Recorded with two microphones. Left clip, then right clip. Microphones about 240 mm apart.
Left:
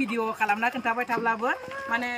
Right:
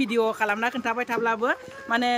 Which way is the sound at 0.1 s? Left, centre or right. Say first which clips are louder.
Right 3 dB; centre.